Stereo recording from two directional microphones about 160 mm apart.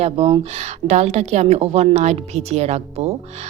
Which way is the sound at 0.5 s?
45° right (ahead or behind).